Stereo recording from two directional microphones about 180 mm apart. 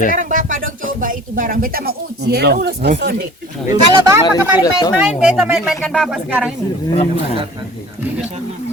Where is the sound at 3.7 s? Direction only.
20° right (ahead or behind).